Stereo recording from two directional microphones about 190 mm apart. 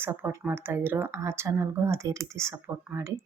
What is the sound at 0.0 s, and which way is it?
Speech, 10° right (ahead or behind).